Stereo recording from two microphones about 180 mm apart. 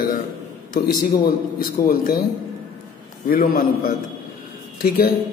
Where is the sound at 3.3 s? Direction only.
55° left (ahead or behind).